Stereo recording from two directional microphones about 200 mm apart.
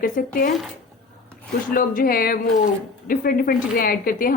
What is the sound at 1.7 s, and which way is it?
A woman's voice, 45° left (ahead or behind).